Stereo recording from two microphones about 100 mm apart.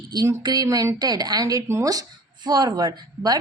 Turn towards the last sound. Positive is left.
turn(degrees=-40)  # may be behind; listen again after turning